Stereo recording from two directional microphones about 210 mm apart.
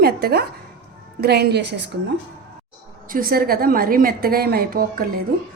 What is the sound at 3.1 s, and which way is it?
A woman's voice, 45° right (ahead or behind).